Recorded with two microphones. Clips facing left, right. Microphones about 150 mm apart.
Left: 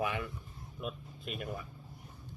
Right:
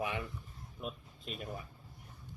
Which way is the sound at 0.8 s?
35° right (ahead or behind).